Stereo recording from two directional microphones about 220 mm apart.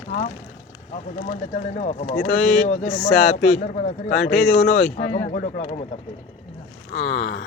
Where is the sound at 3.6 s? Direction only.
35° left (ahead or behind).